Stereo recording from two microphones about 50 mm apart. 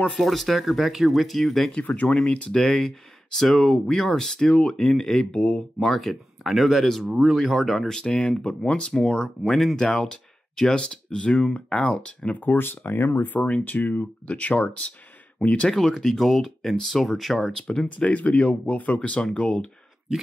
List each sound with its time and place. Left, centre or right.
0.2 s speech: centre
2.0 s speech: centre
2.5 s speech: centre
5.9 s speech: centre
12.4 s speech: left
13.3 s speech: left
15.7 s speech: centre
17.5 s speech: centre
17.8 s speech: left
20.1 s a sound: centre